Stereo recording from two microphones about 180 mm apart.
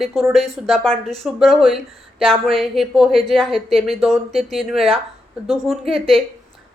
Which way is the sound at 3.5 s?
30° right (ahead or behind).